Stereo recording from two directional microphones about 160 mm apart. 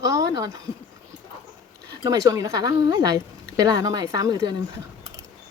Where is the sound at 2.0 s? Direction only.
20° right (ahead or behind).